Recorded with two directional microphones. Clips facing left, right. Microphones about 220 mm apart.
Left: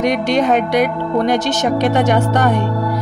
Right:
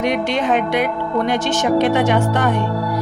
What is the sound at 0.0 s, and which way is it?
Speech, 40° left (ahead or behind).